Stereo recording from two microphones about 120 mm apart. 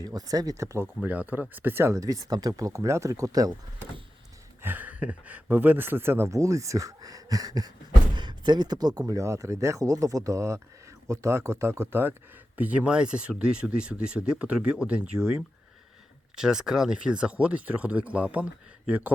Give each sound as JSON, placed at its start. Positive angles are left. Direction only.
{"t": 0.0, "sound": "speech", "side_deg": -30}
{"t": 1.0, "sound": "speech", "side_deg": -15}
{"t": 4.6, "sound": "speech", "side_deg": -15}